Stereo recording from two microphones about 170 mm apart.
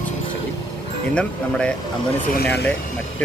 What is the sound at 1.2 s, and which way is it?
Speech, 5° left (ahead or behind).